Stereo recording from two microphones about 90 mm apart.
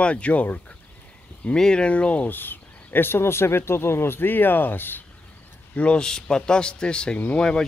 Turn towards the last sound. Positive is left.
turn(degrees=10)  # may be behind; listen again after turning